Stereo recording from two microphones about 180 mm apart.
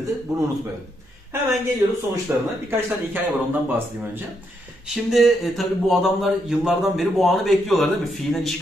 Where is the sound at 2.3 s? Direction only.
10° right (ahead or behind).